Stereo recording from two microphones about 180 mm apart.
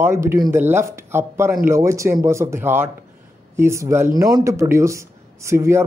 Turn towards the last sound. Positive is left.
turn(degrees=-15)  # may be behind; listen again after turning